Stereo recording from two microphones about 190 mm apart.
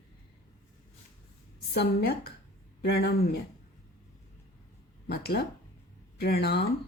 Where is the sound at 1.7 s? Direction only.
55° left (ahead or behind).